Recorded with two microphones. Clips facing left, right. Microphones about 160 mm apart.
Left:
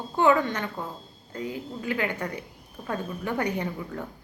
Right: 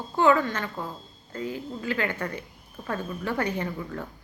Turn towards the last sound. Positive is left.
turn(degrees=15)  # may be behind; listen again after turning